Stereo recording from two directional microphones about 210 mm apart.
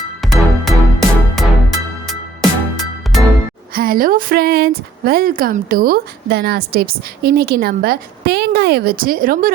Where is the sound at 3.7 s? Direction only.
45° right (ahead or behind).